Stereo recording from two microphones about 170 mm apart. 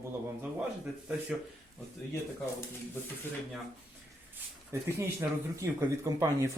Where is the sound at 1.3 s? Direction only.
Centre (ahead or behind).